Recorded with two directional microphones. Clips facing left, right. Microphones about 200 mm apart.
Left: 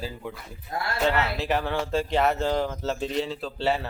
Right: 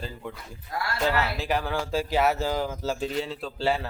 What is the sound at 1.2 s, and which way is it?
Speech, centre (ahead or behind).